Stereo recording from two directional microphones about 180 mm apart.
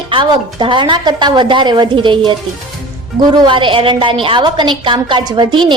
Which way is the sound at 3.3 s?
25° right (ahead or behind).